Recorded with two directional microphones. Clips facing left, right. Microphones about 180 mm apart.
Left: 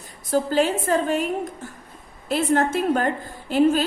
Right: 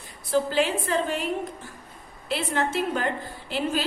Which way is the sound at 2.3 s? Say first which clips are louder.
Left 6 dB; 45° left (ahead or behind).